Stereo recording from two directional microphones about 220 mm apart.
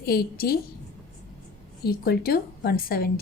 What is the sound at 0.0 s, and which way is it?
Speech, 45° left (ahead or behind).